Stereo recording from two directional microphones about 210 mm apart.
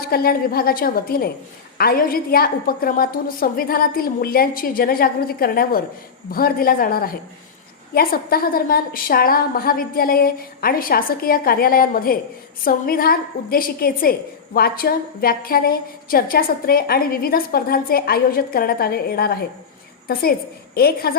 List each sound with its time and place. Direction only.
0.0 s a woman's voice: 45° left (ahead or behind)
20.7 s a woman's voice: 45° left (ahead or behind)